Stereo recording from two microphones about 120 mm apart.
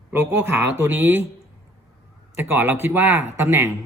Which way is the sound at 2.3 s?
15° right (ahead or behind).